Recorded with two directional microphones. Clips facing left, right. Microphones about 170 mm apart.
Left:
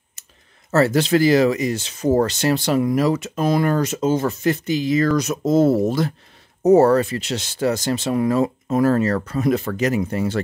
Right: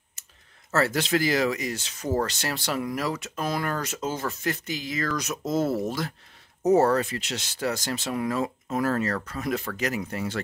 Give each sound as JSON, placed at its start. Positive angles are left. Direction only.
{"t": 0.7, "sound": "speech", "side_deg": 30}